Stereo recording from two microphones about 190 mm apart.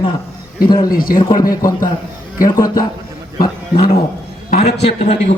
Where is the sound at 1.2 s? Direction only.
25° left (ahead or behind).